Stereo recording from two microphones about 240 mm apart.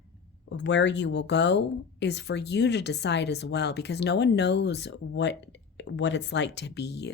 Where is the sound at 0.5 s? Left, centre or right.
Left.